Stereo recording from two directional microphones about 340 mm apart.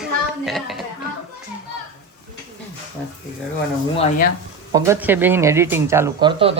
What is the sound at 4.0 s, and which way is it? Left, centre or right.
Speech, left.